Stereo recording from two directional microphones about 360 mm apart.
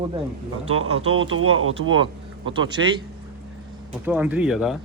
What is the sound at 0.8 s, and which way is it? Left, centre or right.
Speech, right.